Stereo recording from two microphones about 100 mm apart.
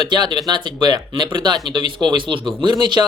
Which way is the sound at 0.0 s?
50° right (ahead or behind).